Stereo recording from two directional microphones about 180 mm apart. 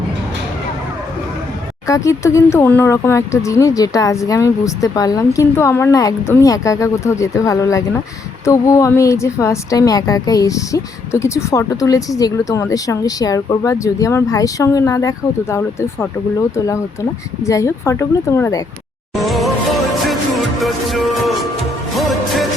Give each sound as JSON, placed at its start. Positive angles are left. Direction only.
{"t": 1.9, "sound": "a woman's voice", "side_deg": 15}
{"t": 17.4, "sound": "a woman's voice", "side_deg": 15}
{"t": 19.1, "sound": "music", "side_deg": 0}